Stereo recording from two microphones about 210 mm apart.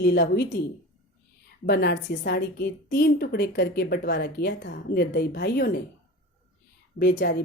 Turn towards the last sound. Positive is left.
turn(degrees=45)  # may be behind; listen again after turning